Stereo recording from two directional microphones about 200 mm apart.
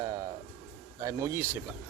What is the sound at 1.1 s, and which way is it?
Speech, 15° right (ahead or behind).